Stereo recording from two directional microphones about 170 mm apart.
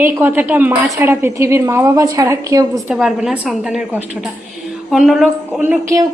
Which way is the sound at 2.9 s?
5° right (ahead or behind).